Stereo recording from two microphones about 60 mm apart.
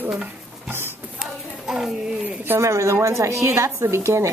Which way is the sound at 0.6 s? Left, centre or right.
Right.